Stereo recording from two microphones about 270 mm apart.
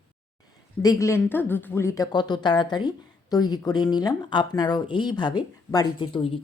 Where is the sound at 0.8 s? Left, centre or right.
Centre.